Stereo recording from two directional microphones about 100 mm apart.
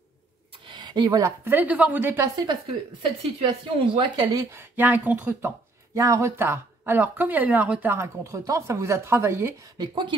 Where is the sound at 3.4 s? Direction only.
60° right (ahead or behind).